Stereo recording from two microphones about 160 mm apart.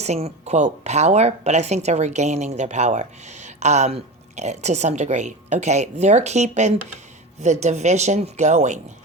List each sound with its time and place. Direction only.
0.0 s speech: 40° right (ahead or behind)